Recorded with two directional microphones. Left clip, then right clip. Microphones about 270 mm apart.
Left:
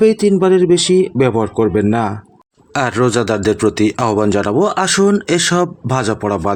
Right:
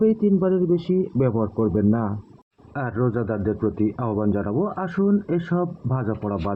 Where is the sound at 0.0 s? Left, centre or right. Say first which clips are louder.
Left 9 dB; left.